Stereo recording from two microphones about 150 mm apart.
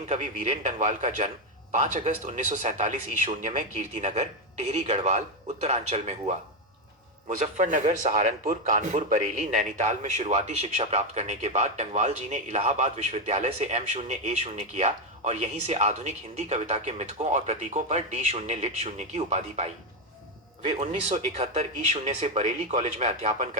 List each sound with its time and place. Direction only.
0.0 s a man's voice: 50° right (ahead or behind)